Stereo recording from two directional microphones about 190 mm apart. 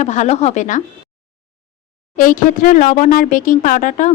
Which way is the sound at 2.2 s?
45° left (ahead or behind).